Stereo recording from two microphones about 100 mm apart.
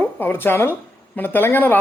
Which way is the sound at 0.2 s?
20° left (ahead or behind).